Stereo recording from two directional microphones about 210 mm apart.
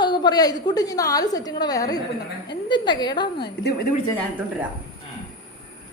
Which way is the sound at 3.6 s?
45° left (ahead or behind).